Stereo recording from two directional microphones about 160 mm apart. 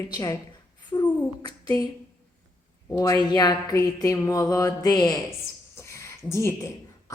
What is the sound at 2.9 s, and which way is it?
A woman's voice, 20° left (ahead or behind).